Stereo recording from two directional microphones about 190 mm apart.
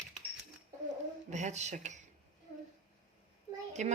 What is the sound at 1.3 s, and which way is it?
Speech, 40° right (ahead or behind).